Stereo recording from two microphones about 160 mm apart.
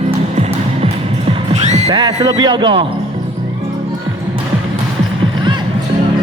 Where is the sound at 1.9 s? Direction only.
25° right (ahead or behind).